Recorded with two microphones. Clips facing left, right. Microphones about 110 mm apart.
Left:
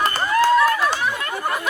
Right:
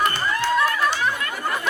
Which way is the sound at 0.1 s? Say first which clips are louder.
Left 6 dB; 40° left (ahead or behind).